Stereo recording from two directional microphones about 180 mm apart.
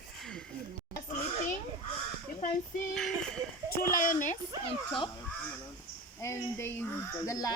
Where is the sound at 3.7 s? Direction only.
50° left (ahead or behind).